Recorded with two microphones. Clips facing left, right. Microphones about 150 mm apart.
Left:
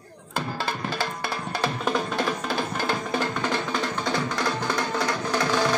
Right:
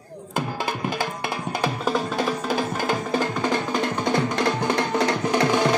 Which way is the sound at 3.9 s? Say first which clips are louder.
Right 4 dB; 20° right (ahead or behind).